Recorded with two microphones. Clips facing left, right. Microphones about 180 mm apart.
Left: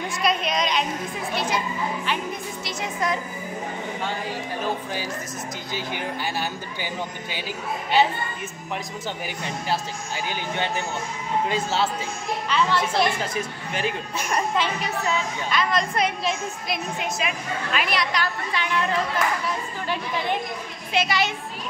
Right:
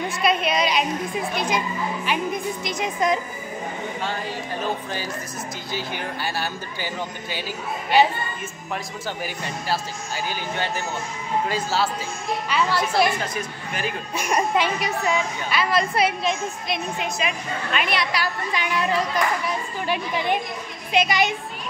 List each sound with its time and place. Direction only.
0.2 s a woman's voice: 5° right (ahead or behind)
5.7 s speech: 15° left (ahead or behind)
9.7 s speech: 20° left (ahead or behind)
12.4 s a woman's voice: 10° right (ahead or behind)
14.1 s a woman's voice: 15° right (ahead or behind)